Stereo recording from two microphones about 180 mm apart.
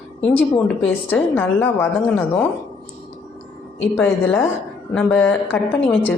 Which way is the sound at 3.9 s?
10° left (ahead or behind).